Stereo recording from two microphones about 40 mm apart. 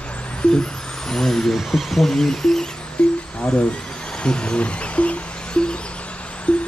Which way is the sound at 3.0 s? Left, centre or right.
Left.